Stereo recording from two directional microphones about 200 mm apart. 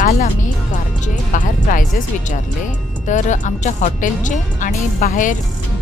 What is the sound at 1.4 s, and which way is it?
Speech, 40° left (ahead or behind).